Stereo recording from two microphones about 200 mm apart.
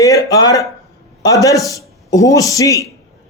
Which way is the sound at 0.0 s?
15° left (ahead or behind).